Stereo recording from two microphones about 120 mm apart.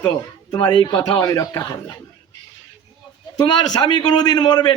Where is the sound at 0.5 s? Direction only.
35° left (ahead or behind).